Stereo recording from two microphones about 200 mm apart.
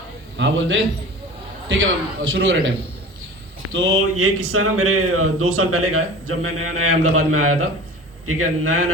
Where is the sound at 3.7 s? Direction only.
90° right.